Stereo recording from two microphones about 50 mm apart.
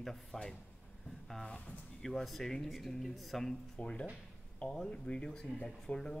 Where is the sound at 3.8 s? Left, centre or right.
Left.